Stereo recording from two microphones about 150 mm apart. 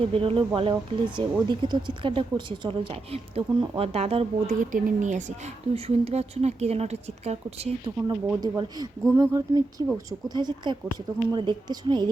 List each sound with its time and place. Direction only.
0.1 s speech: 35° right (ahead or behind)
8.4 s a woman's voice: 25° right (ahead or behind)